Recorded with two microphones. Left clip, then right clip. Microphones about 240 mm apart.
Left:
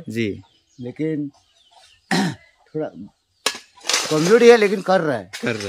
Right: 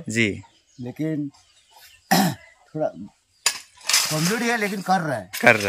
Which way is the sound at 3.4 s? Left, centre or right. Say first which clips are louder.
Left 1 dB; left.